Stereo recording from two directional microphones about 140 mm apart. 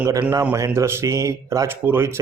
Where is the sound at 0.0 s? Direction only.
15° right (ahead or behind).